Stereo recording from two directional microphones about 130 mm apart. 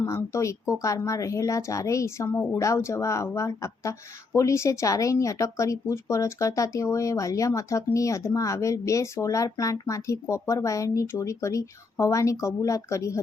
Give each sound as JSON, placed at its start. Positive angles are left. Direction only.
{"t": 0.0, "sound": "speech", "side_deg": 20}